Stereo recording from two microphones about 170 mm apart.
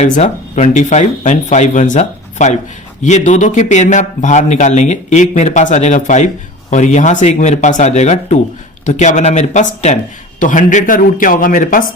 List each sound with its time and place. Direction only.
0.0 s speech: 45° left (ahead or behind)